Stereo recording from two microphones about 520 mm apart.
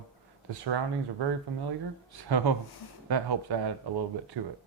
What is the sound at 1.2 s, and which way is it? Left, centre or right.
Speech, right.